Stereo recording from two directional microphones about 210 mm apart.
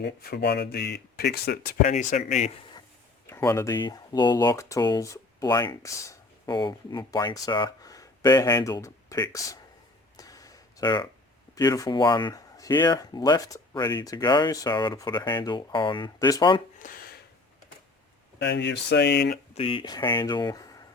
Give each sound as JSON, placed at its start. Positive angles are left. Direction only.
{"t": 0.0, "sound": "speech", "side_deg": 50}
{"t": 3.2, "sound": "speech", "side_deg": 15}
{"t": 10.2, "sound": "a sound", "side_deg": 15}
{"t": 11.5, "sound": "speech", "side_deg": 15}
{"t": 16.7, "sound": "a sound", "side_deg": 40}
{"t": 18.3, "sound": "speech", "side_deg": 55}
{"t": 19.5, "sound": "speech", "side_deg": 25}